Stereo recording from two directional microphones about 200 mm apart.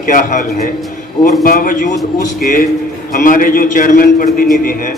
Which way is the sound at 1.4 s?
45° left (ahead or behind).